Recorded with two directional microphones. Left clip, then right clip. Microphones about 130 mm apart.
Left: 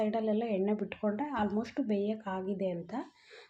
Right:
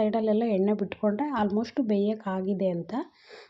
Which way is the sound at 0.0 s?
40° right (ahead or behind).